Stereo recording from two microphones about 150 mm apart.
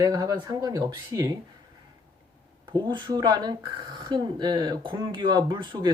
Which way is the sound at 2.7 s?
30° right (ahead or behind).